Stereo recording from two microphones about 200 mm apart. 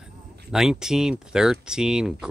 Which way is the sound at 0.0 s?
Centre (ahead or behind).